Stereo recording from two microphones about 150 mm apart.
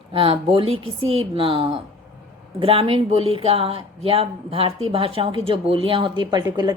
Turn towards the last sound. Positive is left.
turn(degrees=-30)  # may be behind; listen again after turning